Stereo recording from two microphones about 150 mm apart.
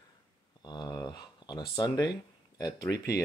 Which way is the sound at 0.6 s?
30° left (ahead or behind).